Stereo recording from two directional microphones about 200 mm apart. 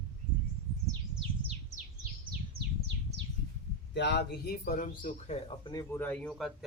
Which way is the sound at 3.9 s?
60° left (ahead or behind).